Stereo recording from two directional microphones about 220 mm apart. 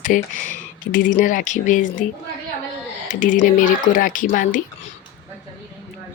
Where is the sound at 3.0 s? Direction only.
35° left (ahead or behind).